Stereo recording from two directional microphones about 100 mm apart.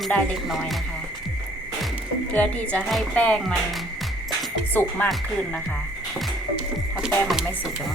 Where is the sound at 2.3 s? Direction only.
10° left (ahead or behind).